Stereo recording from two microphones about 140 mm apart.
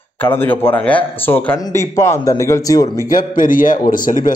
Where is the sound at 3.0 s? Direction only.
80° left.